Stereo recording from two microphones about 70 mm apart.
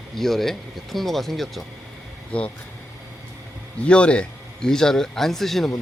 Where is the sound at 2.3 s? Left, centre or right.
Centre.